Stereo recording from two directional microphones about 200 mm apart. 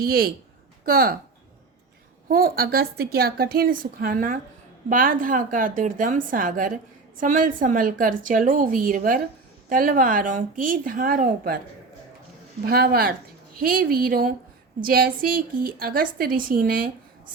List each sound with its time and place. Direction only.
0.0 s a woman's voice: 50° right (ahead or behind)
2.2 s a woman's voice: 45° right (ahead or behind)
12.6 s a woman's voice: 50° right (ahead or behind)